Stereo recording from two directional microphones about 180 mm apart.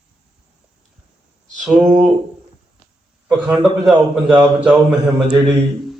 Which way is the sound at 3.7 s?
Centre (ahead or behind).